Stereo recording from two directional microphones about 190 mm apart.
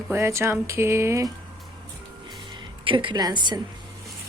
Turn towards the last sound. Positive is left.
turn(degrees=-25)  # may be behind; listen again after turning